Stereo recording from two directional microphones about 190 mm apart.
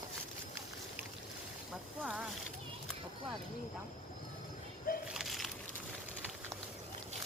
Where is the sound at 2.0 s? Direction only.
5° right (ahead or behind).